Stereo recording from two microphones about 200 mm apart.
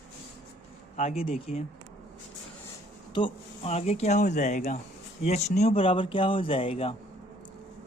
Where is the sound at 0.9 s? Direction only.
30° left (ahead or behind).